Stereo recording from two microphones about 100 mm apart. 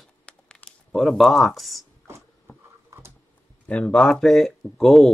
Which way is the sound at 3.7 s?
10° left (ahead or behind).